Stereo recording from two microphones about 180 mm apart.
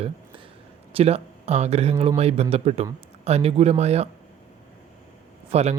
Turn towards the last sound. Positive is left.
turn(degrees=-35)  # may be behind; listen again after turning